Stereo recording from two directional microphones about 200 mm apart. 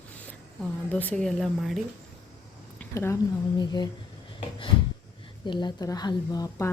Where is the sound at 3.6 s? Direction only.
20° left (ahead or behind).